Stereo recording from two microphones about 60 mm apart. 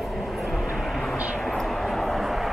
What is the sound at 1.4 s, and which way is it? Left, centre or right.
Vehicle, centre.